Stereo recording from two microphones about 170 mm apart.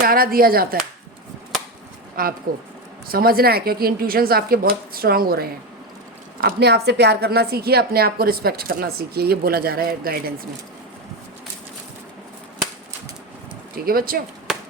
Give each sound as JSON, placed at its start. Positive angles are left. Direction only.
{"t": 0.0, "sound": "a woman's voice", "side_deg": -60}
{"t": 2.2, "sound": "a woman's voice", "side_deg": -60}
{"t": 13.7, "sound": "a woman's voice", "side_deg": -60}
{"t": 14.5, "sound": "a sound", "side_deg": 0}